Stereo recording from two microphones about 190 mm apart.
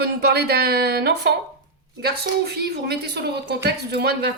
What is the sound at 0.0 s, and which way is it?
Speech, 60° right (ahead or behind).